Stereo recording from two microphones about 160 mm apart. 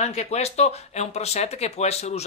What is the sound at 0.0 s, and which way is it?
Speech, 45° left (ahead or behind).